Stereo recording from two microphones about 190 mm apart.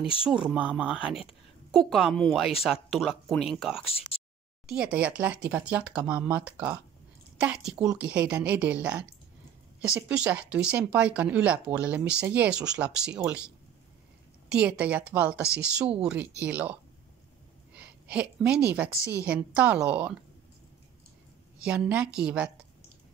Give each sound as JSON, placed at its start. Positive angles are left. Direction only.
{"t": 0.5, "sound": "speech", "side_deg": -5}
{"t": 3.8, "sound": "speech", "side_deg": 30}
{"t": 4.6, "sound": "speech", "side_deg": -5}
{"t": 14.5, "sound": "speech", "side_deg": -5}
{"t": 17.7, "sound": "a sound", "side_deg": -5}
{"t": 18.7, "sound": "speech", "side_deg": -10}
{"t": 21.6, "sound": "speech", "side_deg": -5}